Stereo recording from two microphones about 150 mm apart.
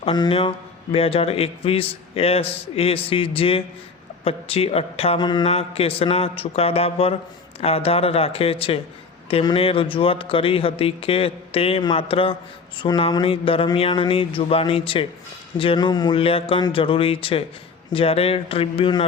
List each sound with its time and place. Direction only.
0.0 s a man's voice: 35° left (ahead or behind)
5.2 s mantra: 30° left (ahead or behind)
5.5 s a man's voice: 40° left (ahead or behind)
16.2 s a man's voice: 40° left (ahead or behind)